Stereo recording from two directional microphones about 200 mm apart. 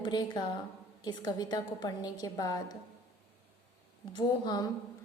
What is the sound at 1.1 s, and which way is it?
A woman's voice, 20° left (ahead or behind).